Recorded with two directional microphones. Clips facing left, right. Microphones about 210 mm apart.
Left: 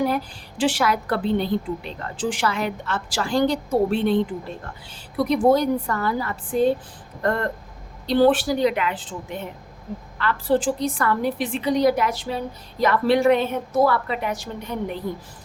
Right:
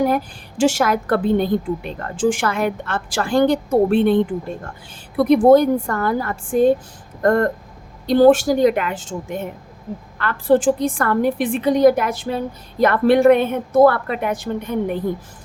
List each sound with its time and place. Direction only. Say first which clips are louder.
0.0 s a woman's voice: right 4 dB; 50° right (ahead or behind)